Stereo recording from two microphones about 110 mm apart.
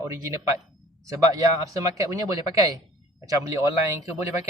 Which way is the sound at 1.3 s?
35° right (ahead or behind).